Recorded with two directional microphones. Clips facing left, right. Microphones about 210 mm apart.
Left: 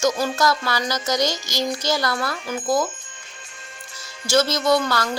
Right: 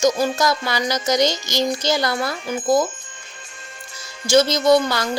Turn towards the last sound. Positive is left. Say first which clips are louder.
# right 4 dB
turn(degrees=-20)  # may be behind; listen again after turning